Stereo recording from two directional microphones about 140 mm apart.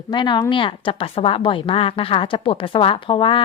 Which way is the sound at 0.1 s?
30° left (ahead or behind).